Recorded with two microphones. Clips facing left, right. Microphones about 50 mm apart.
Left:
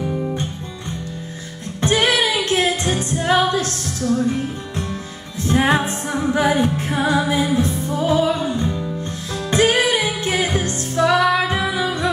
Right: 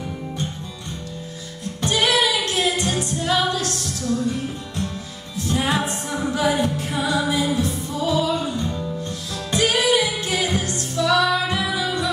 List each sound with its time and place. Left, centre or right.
0.0 s music: centre
1.8 s music: left